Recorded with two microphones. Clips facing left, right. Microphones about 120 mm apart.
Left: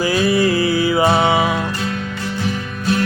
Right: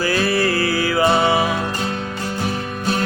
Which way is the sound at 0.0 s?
15° left (ahead or behind).